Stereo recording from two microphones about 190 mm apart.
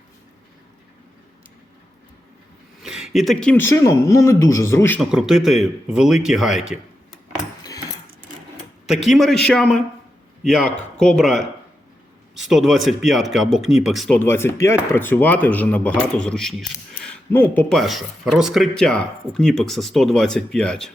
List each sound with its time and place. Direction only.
2.8 s speech: 5° right (ahead or behind); by 4.9 s 15° left (ahead or behind)
4.9 s speech: centre (ahead or behind)
7.6 s a sound: 20° left (ahead or behind)
8.9 s speech: centre (ahead or behind)
12.5 s speech: centre (ahead or behind)
14.2 s speech: 10° left (ahead or behind)